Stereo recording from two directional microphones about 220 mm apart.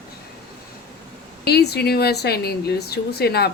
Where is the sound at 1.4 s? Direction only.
45° left (ahead or behind).